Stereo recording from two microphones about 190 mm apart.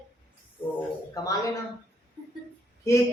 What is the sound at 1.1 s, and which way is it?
Speech, 20° left (ahead or behind).